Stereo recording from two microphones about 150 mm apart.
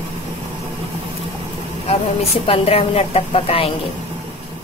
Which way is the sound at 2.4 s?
40° left (ahead or behind).